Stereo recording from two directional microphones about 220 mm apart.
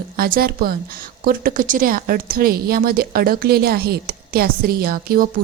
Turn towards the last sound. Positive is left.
turn(degrees=-45)  # may be behind; listen again after turning